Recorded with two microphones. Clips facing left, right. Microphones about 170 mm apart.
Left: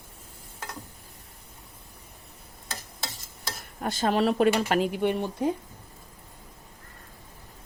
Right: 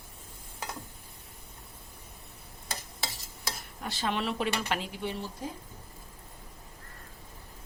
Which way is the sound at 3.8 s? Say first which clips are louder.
Left 8 dB; 45° left (ahead or behind).